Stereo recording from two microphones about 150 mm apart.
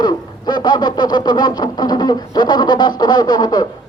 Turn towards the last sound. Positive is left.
turn(degrees=25)  # may be behind; listen again after turning